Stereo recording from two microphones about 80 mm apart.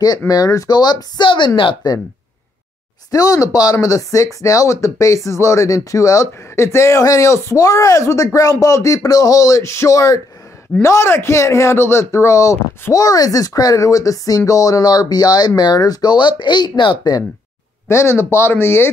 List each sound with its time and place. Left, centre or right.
0.3 s speech: left
3.1 s speech: left
7.5 s speech: left
17.8 s speech: left